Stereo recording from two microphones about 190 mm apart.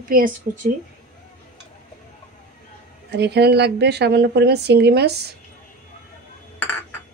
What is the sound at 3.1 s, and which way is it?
A woman's voice, 60° right (ahead or behind).